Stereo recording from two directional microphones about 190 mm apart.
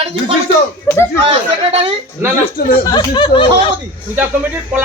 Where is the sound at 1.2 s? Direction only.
30° right (ahead or behind).